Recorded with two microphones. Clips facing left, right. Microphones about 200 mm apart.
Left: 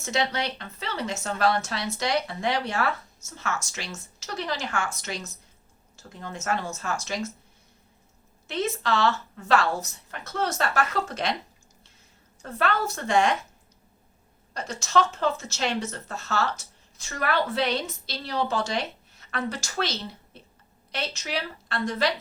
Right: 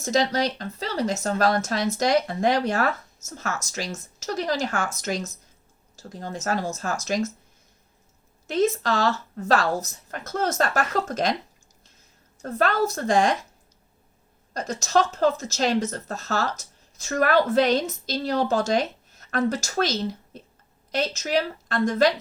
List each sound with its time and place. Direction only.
0.0 s a woman's voice: 40° right (ahead or behind)
8.4 s a woman's voice: 40° right (ahead or behind)
12.4 s a woman's voice: 40° right (ahead or behind)
14.5 s speech: 40° right (ahead or behind)